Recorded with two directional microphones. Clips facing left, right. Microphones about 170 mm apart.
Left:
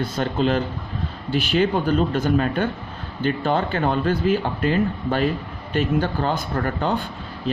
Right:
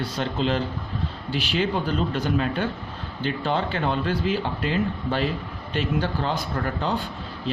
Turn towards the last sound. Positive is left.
turn(degrees=50)  # may be behind; listen again after turning